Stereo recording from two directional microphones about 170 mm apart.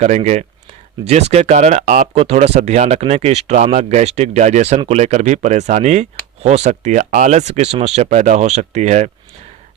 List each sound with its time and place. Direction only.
0.0 s speech: 45° right (ahead or behind)
2.1 s speech: 35° right (ahead or behind)